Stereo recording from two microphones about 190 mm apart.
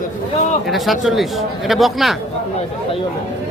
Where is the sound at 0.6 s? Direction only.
Centre (ahead or behind).